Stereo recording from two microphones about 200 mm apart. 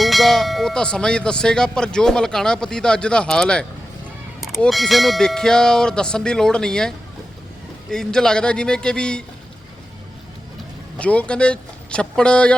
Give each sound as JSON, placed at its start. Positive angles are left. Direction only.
{"t": 0.0, "sound": "speech", "side_deg": 0}
{"t": 10.9, "sound": "speech", "side_deg": 5}